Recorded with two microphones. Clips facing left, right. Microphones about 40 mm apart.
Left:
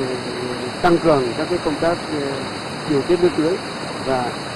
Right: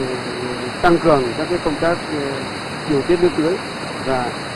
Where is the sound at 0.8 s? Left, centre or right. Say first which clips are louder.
Right 1 dB; centre.